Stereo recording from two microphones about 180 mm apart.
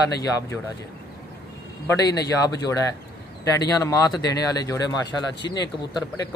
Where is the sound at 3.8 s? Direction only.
20° left (ahead or behind).